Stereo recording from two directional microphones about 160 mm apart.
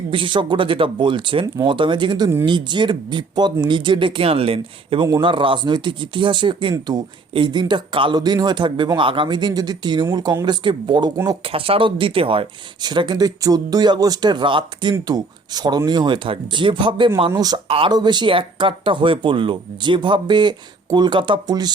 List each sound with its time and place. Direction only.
0.1 s speech: 30° right (ahead or behind)